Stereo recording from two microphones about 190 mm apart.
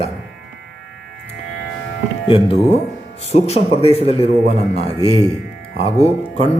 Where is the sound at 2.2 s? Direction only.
30° left (ahead or behind).